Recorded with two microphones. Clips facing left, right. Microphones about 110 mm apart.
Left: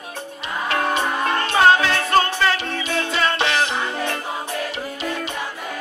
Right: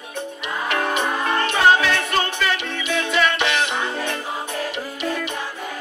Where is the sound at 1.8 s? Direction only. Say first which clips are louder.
Left 3 dB; 35° left (ahead or behind).